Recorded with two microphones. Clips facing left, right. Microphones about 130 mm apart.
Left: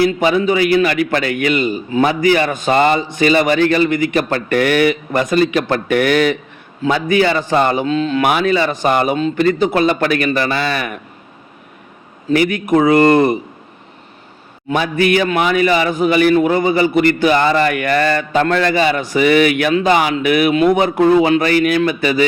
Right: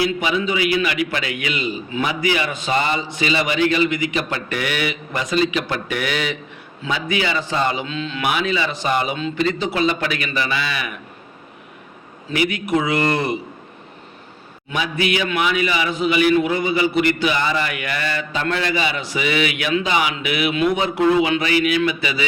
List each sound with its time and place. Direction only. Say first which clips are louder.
0.0 s a man's voice: left 7 dB; 45° left (ahead or behind)
12.3 s a man's voice: left 6 dB; 45° left (ahead or behind)
14.7 s a man's voice: left 7 dB; 45° left (ahead or behind)